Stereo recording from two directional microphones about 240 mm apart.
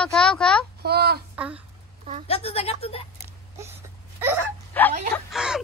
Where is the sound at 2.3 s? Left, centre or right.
Left.